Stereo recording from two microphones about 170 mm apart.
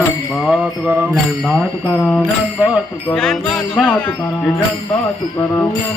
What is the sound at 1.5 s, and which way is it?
Music, 5° left (ahead or behind).